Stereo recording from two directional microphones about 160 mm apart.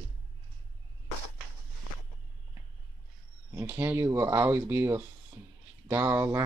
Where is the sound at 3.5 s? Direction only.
15° right (ahead or behind).